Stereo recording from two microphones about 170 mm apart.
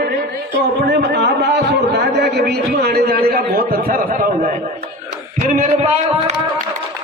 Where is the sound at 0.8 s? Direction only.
90° right; by 4.5 s 55° right (ahead or behind).